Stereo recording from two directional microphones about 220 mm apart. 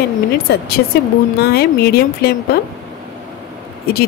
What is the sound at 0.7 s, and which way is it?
Speech, 45° left (ahead or behind).